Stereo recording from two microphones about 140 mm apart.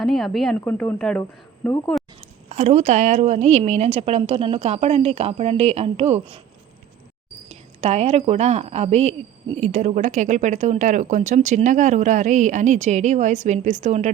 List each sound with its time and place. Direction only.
0.0 s speech: centre (ahead or behind)
0.5 s speech: 10° left (ahead or behind)
1.2 s speech: 20° left (ahead or behind)
2.5 s a woman's voice: 55° right (ahead or behind)
7.8 s a woman's voice: 50° right (ahead or behind)